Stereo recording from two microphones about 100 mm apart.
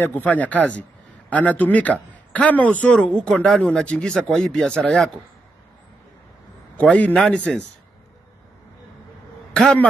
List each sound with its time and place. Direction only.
0.0 s a man's voice: 15° left (ahead or behind)
6.8 s a man's voice: 15° left (ahead or behind)
9.5 s a man's voice: 10° left (ahead or behind)